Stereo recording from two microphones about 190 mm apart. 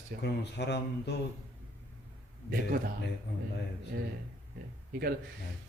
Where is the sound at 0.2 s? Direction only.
60° left (ahead or behind).